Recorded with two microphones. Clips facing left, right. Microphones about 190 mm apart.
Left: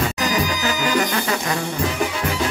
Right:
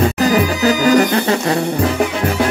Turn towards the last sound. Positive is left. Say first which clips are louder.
# right 7 dB
turn(degrees=-35)  # may be behind; listen again after turning